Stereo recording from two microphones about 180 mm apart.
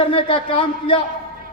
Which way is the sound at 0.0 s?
30° left (ahead or behind).